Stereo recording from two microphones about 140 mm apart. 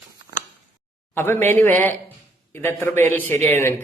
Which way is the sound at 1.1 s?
15° left (ahead or behind).